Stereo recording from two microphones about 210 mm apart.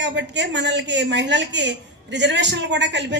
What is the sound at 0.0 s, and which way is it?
A woman's voice, 55° right (ahead or behind).